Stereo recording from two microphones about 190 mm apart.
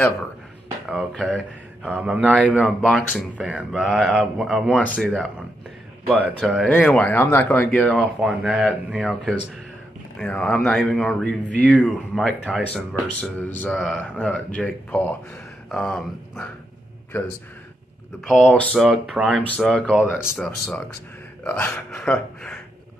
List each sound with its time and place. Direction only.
0.8 s speech: centre (ahead or behind)
6.6 s speech: 5° left (ahead or behind)
8.0 s speech: 5° right (ahead or behind); by 17.3 s 10° left (ahead or behind)
18.2 s speech: centre (ahead or behind)